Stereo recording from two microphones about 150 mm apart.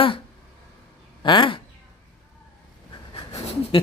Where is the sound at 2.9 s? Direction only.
40° left (ahead or behind).